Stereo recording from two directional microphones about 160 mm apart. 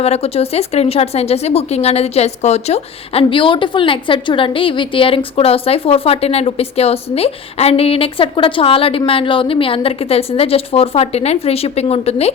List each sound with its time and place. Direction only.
0.0 s speech: 40° left (ahead or behind)